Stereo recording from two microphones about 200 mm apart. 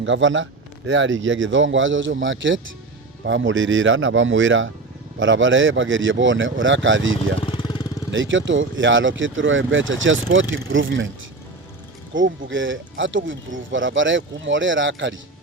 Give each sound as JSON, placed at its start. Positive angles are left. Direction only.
{"t": 0.0, "sound": "speech", "side_deg": -70}
{"t": 7.4, "sound": "vehicle", "side_deg": 25}
{"t": 8.1, "sound": "speech", "side_deg": -70}
{"t": 12.1, "sound": "speech", "side_deg": -70}